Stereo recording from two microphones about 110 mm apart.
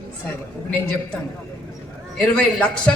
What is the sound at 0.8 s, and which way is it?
Speech, 10° left (ahead or behind).